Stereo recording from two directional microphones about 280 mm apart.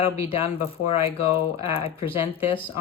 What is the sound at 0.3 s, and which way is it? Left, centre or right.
Speech, centre.